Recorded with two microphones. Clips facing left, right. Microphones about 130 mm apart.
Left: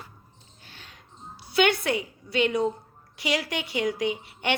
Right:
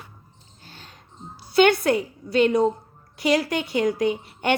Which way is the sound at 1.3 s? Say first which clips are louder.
Right 5 dB; 40° right (ahead or behind).